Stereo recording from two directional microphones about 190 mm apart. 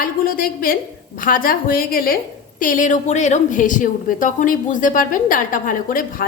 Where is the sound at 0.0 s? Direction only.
50° left (ahead or behind).